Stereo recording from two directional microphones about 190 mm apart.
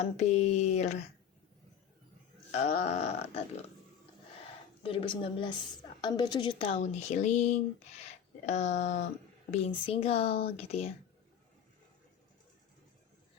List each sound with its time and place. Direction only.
0.2 s speech: 35° left (ahead or behind)
2.5 s speech: 35° left (ahead or behind)
4.8 s a woman's voice: 30° left (ahead or behind)